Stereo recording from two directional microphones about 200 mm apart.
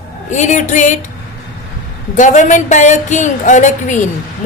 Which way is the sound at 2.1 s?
40° left (ahead or behind).